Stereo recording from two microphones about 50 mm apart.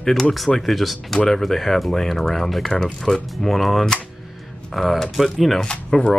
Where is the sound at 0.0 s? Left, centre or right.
Centre.